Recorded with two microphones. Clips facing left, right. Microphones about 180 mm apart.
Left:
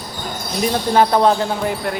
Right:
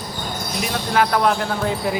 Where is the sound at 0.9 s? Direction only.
30° left (ahead or behind).